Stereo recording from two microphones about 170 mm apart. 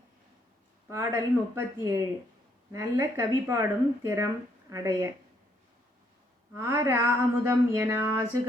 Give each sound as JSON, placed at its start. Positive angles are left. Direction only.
{"t": 0.9, "sound": "a woman's voice", "side_deg": -15}
{"t": 6.5, "sound": "speech", "side_deg": -15}